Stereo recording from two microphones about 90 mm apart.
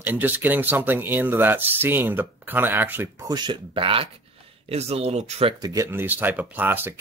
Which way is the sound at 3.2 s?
55° right (ahead or behind).